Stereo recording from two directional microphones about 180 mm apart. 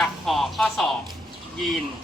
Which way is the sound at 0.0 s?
Centre (ahead or behind).